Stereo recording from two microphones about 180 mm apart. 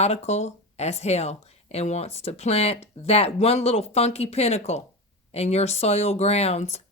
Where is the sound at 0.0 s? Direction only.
35° left (ahead or behind).